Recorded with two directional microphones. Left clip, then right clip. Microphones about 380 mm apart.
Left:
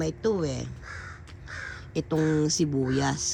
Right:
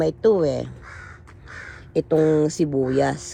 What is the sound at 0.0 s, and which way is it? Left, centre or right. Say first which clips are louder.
Speech: right 9 dB; centre.